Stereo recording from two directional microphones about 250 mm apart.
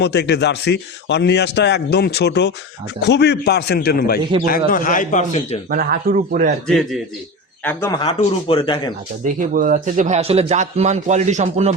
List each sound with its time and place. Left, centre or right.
0.0 s a man's voice: left
5.7 s a man's voice: right
6.7 s a man's voice: centre
9.2 s speech: right